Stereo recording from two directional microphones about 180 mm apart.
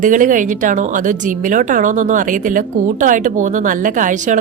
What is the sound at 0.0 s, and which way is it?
A woman's voice, 45° right (ahead or behind).